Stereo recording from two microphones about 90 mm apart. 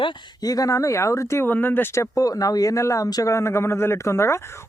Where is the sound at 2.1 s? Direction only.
40° left (ahead or behind).